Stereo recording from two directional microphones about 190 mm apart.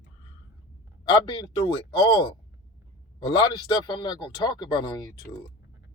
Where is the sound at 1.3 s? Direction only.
20° left (ahead or behind).